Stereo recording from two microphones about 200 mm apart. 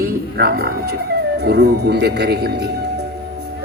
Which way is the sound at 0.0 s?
50° right (ahead or behind).